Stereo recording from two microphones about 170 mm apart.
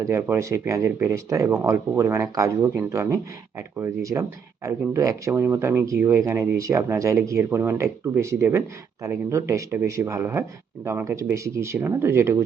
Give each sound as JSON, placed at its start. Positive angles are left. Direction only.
{"t": 0.0, "sound": "speech", "side_deg": -15}